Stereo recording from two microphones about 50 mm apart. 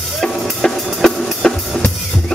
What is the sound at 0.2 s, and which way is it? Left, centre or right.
Music, centre.